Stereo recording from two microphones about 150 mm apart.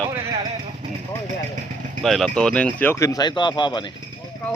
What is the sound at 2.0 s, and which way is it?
Speech, 5° left (ahead or behind).